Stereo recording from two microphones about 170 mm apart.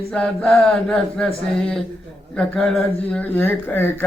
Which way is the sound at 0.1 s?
5° left (ahead or behind).